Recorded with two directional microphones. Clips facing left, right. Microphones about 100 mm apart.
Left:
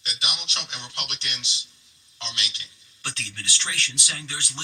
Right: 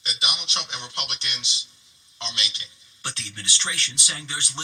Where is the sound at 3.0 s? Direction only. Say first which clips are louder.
Even; 20° right (ahead or behind).